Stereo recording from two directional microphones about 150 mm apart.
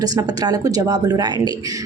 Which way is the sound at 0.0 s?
25° right (ahead or behind).